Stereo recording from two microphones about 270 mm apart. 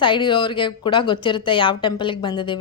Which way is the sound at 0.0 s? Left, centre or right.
Centre.